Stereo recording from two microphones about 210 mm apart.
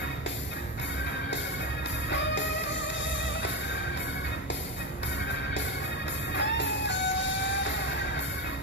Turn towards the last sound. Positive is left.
turn(degrees=55)  # may be behind; listen again after turning